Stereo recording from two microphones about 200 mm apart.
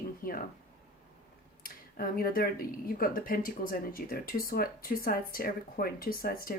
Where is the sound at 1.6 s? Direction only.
45° left (ahead or behind).